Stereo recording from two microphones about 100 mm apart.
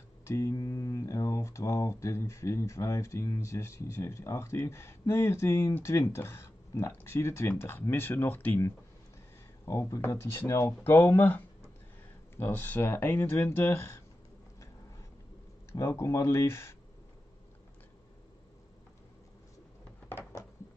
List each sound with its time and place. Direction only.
0.2 s speech: 30° left (ahead or behind)
9.7 s speech: 30° left (ahead or behind)
15.9 s speech: 30° left (ahead or behind)
20.1 s a sound: 25° left (ahead or behind)